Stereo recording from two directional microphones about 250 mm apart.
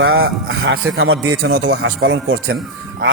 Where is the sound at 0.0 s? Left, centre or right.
Right.